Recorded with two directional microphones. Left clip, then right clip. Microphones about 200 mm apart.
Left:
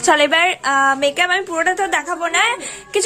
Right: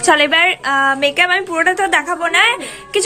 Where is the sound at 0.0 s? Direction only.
25° left (ahead or behind).